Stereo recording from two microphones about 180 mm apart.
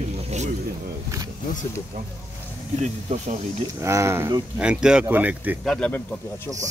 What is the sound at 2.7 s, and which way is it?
Speech, 40° right (ahead or behind).